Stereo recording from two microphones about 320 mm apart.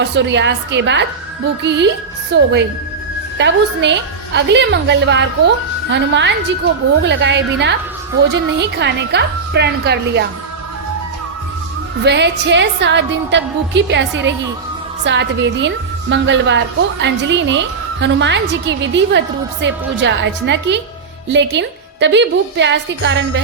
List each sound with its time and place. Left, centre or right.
0.0 s a woman's voice: right
12.0 s a woman's voice: right